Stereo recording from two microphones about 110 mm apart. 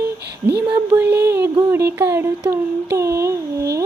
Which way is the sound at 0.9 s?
20° right (ahead or behind).